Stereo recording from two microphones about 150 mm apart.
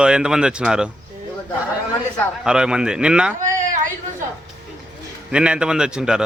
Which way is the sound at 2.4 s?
5° right (ahead or behind).